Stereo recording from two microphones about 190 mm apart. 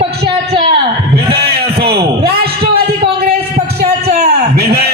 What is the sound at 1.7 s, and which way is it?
A man's voice, 55° right (ahead or behind).